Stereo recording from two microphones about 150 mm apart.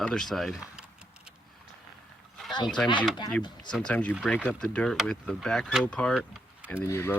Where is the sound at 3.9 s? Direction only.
10° left (ahead or behind).